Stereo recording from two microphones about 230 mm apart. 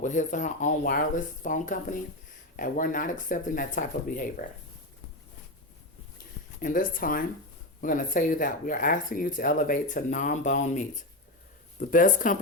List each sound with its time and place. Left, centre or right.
0.0 s speech: left
6.6 s speech: left